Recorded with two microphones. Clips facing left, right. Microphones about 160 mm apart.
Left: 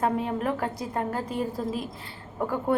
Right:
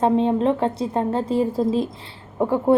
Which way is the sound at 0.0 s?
25° right (ahead or behind).